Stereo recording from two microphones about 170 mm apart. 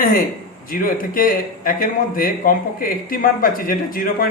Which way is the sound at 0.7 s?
55° left (ahead or behind).